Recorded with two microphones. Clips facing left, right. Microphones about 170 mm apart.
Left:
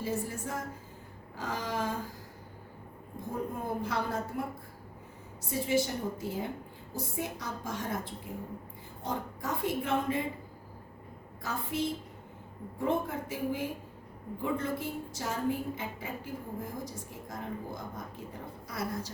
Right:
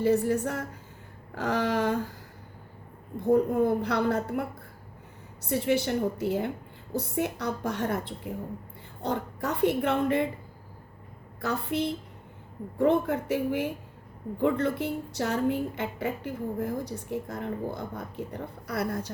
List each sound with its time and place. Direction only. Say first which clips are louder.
0.0 s a woman's voice: right 11 dB; 70° right (ahead or behind)
3.6 s a woman's voice: right 9 dB; 70° right (ahead or behind)
11.4 s a woman's voice: right 5 dB; 70° right (ahead or behind)